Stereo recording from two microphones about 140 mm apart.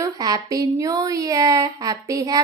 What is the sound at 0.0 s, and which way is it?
A woman's voice, 25° right (ahead or behind).